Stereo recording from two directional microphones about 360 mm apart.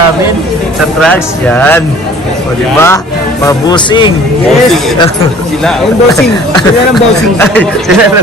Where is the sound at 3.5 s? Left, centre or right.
Centre.